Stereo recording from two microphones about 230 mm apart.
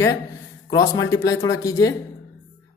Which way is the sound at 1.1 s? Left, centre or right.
Centre.